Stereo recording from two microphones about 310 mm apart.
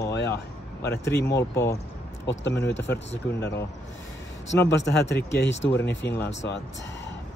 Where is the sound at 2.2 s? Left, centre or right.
Left.